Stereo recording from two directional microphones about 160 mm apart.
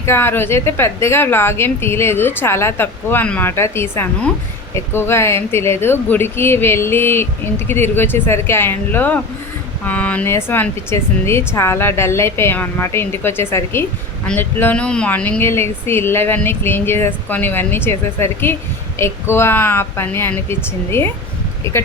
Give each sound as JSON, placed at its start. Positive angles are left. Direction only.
{"t": 0.0, "sound": "speech", "side_deg": 15}